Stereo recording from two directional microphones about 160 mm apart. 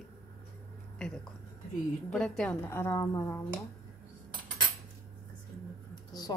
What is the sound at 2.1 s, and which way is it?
Speech, 5° left (ahead or behind).